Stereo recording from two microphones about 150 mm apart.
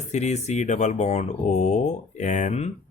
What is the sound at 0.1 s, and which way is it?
Speech, 50° left (ahead or behind).